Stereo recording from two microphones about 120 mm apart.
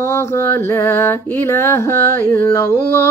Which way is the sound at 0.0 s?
20° left (ahead or behind).